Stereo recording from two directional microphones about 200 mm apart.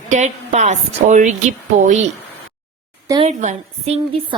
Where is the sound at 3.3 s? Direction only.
35° right (ahead or behind).